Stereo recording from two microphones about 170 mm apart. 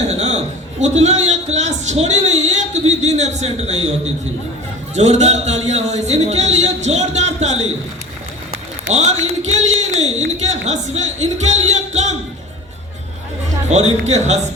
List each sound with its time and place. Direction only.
0.1 s a sound: 40° right (ahead or behind)
0.8 s a man's voice: 40° right (ahead or behind)
8.9 s a man's voice: 40° right (ahead or behind)
13.7 s a man's voice: 40° right (ahead or behind)